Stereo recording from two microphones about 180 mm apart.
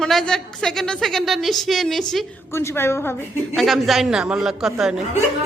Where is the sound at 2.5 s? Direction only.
15° left (ahead or behind).